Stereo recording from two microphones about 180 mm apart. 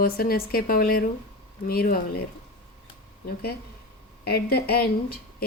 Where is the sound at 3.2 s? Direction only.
60° left (ahead or behind).